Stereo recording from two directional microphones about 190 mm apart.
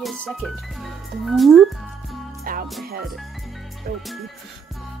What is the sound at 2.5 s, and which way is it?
Music, 50° right (ahead or behind).